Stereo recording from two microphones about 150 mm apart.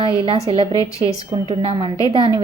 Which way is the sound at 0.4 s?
35° right (ahead or behind).